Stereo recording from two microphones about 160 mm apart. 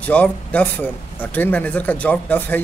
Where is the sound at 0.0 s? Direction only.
10° left (ahead or behind).